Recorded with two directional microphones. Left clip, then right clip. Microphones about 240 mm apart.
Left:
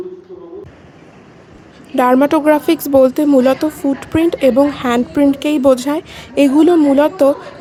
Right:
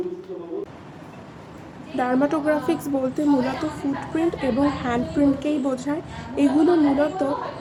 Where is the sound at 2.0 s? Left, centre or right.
Left.